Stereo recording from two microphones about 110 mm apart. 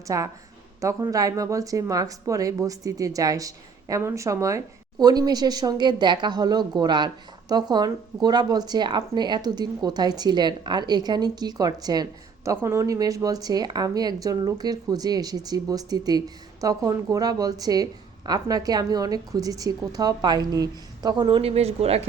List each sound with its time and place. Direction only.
0.1 s a woman's voice: 30° right (ahead or behind); by 21.5 s 45° right (ahead or behind)
21.5 s speech: 70° right (ahead or behind)